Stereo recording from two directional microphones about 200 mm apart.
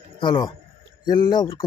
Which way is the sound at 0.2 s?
20° left (ahead or behind).